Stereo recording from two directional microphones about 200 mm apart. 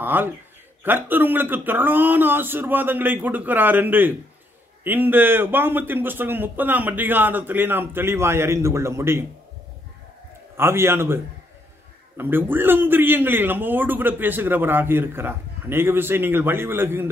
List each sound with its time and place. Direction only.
0.0 s a man's voice: 10° right (ahead or behind)
10.6 s a man's voice: 10° right (ahead or behind)
12.2 s a man's voice: 10° right (ahead or behind)